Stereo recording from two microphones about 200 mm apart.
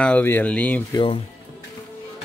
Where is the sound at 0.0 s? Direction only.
10° left (ahead or behind).